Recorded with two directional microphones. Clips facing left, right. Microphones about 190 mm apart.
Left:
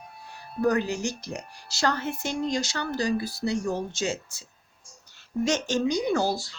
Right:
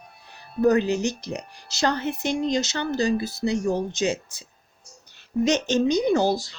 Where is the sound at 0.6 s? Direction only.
20° right (ahead or behind).